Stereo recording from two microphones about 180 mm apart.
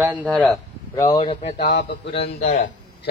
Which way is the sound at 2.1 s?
35° left (ahead or behind).